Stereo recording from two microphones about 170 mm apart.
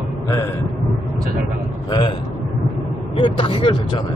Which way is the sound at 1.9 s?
25° left (ahead or behind).